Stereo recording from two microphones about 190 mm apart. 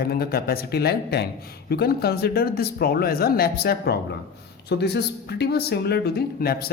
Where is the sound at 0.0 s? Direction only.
55° left (ahead or behind).